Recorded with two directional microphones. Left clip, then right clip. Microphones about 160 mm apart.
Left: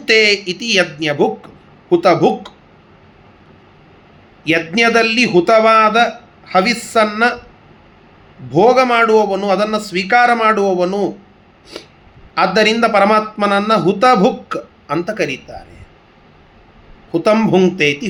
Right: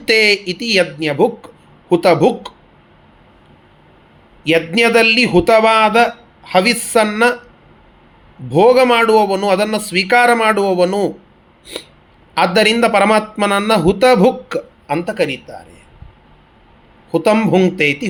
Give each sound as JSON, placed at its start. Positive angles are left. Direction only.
{"t": 0.0, "sound": "speech", "side_deg": -45}
{"t": 4.4, "sound": "speech", "side_deg": -45}
{"t": 8.4, "sound": "speech", "side_deg": -50}
{"t": 12.3, "sound": "speech", "side_deg": -50}
{"t": 17.1, "sound": "speech", "side_deg": -45}